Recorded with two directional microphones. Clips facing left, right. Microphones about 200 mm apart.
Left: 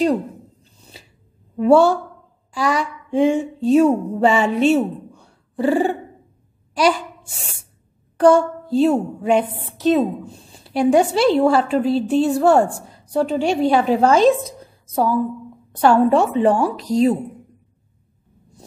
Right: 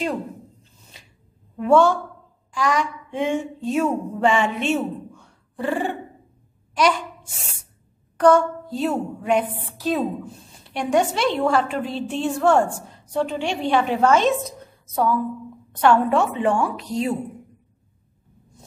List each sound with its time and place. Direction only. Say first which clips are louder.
1.6 s a woman's voice: left 3 dB; 35° left (ahead or behind)
2.5 s a sound: left 2 dB; 35° left (ahead or behind)
8.2 s a woman's voice: left 3 dB; 30° left (ahead or behind)
10.6 s a woman's voice: left 5 dB; 35° left (ahead or behind)